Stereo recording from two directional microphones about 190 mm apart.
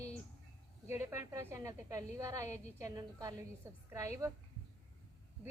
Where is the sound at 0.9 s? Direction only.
15° right (ahead or behind).